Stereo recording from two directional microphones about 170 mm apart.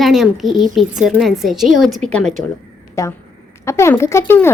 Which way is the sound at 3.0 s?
15° left (ahead or behind).